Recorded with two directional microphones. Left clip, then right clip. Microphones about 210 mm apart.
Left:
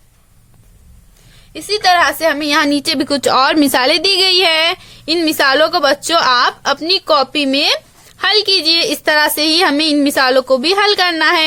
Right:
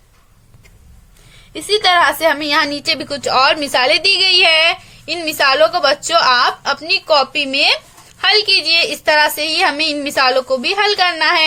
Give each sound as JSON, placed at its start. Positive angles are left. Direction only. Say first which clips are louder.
{"t": 1.5, "sound": "a woman's voice", "louder": "left 1 dB", "side_deg": 20}